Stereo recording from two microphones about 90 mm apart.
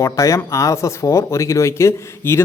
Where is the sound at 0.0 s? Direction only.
35° left (ahead or behind).